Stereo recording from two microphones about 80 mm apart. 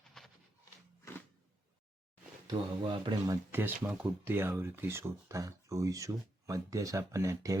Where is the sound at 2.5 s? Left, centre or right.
Right.